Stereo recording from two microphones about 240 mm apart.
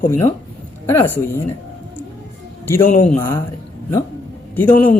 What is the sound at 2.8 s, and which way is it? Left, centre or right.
Speech, left.